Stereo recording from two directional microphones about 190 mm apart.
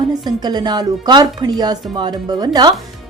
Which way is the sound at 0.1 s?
20° right (ahead or behind).